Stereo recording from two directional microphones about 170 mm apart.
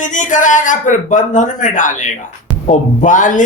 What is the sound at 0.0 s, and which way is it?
A man's voice, 50° left (ahead or behind).